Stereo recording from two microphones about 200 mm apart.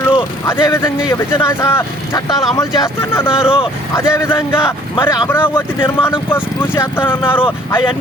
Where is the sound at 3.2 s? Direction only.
25° left (ahead or behind).